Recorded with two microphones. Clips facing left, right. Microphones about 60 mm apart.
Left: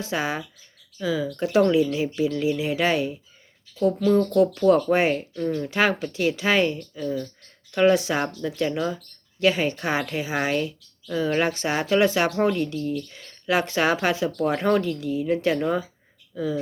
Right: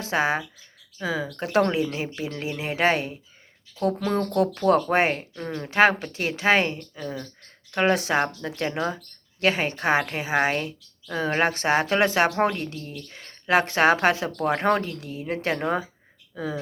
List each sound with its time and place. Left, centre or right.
0.0 s speech: right